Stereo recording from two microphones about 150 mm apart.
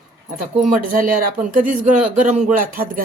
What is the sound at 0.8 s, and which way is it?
Speech, 70° right (ahead or behind).